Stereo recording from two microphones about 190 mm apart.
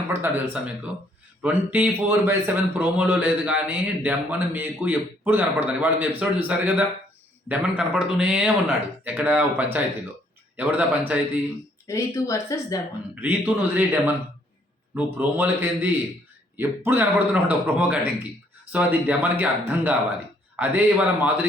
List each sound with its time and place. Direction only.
0.1 s a man's voice: 10° right (ahead or behind)
11.9 s speech: 15° left (ahead or behind)
13.2 s speech: 10° right (ahead or behind)